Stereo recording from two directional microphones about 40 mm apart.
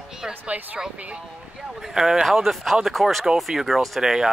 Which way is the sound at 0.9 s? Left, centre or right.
Right.